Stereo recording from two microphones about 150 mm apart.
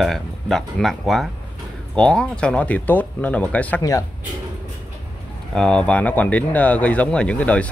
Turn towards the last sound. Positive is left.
turn(degrees=10)  # may be behind; listen again after turning